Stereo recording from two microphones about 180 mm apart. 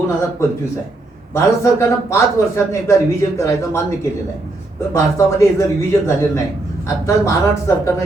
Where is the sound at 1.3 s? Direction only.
15° left (ahead or behind).